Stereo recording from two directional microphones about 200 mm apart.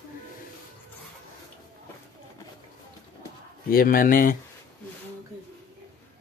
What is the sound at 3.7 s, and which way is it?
Speech, 45° left (ahead or behind).